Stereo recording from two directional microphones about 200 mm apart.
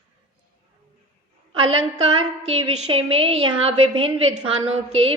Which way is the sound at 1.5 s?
25° right (ahead or behind).